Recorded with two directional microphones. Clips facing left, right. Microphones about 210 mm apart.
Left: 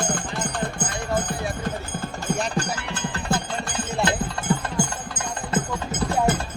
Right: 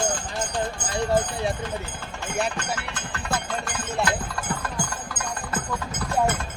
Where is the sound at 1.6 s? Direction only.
40° left (ahead or behind).